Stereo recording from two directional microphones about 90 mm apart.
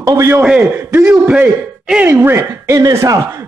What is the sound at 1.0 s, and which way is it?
A man's voice, 15° right (ahead or behind).